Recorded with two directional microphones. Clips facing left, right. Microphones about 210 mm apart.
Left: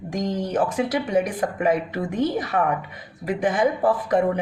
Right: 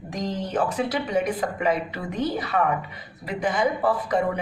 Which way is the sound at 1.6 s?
50° left (ahead or behind).